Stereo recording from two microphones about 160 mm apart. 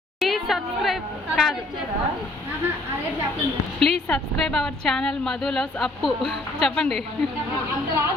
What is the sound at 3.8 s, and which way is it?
A woman's voice, 5° left (ahead or behind).